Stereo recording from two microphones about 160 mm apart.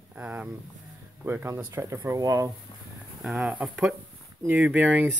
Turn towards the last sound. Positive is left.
turn(degrees=-10)  # may be behind; listen again after turning